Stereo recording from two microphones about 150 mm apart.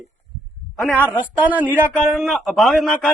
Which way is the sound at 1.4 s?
10° right (ahead or behind).